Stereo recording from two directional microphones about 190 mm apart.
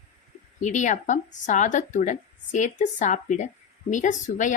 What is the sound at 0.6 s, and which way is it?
Speech, 40° left (ahead or behind).